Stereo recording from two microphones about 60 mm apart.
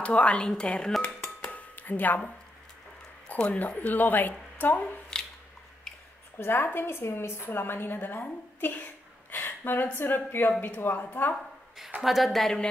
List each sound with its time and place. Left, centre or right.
0.0 s speech: left
1.4 s a sound: left
3.3 s speech: left
5.1 s squish: centre
5.9 s a sound: centre
6.3 s a woman's voice: left
12.0 s speech: centre